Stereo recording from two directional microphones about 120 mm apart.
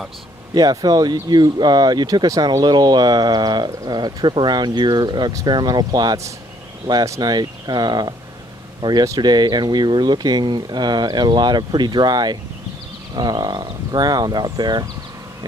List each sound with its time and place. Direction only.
0.6 s speech: 30° right (ahead or behind)